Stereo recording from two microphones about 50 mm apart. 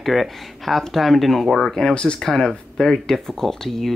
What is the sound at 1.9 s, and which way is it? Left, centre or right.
Speech, left.